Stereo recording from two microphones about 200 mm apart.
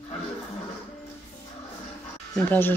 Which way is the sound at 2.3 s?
10° left (ahead or behind).